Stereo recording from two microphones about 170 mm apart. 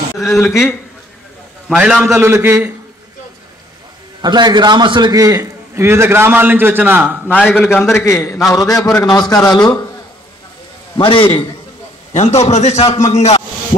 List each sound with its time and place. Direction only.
0.1 s a man's voice: 15° left (ahead or behind)
1.7 s a man's voice: 5° right (ahead or behind)
2.0 s a man's voice: 15° right (ahead or behind)
4.2 s a man's voice: 25° right (ahead or behind); by 7.2 s 10° right (ahead or behind)
7.2 s a man's voice: 10° left (ahead or behind)
11.0 s a man's voice: 30° left (ahead or behind)